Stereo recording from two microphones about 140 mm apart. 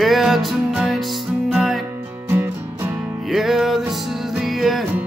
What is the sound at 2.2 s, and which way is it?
Music, 15° right (ahead or behind).